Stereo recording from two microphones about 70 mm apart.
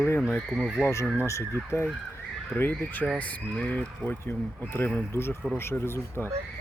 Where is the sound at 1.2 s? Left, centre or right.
Left.